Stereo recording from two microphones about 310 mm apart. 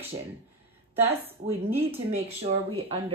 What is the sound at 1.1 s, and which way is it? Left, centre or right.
Speech, centre.